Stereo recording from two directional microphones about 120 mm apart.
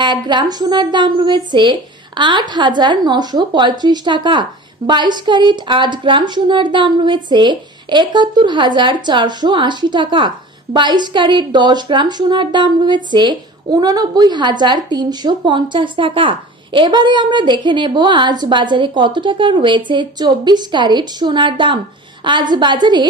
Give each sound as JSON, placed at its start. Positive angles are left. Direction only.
{"t": 0.0, "sound": "a woman's voice", "side_deg": -40}